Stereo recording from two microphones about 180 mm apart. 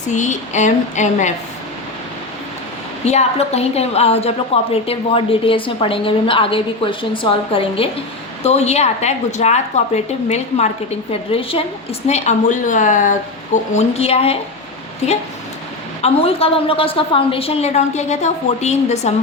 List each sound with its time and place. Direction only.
0.1 s a woman's voice: 40° left (ahead or behind)
3.0 s a woman's voice: 35° left (ahead or behind)